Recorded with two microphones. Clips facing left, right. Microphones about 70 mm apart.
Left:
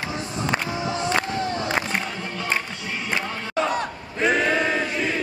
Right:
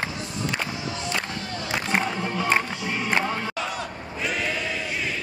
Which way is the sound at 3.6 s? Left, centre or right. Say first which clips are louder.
Left 5 dB; left.